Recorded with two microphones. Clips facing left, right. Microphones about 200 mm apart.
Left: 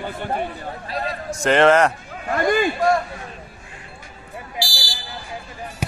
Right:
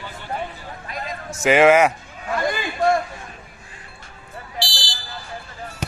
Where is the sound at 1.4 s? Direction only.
5° right (ahead or behind).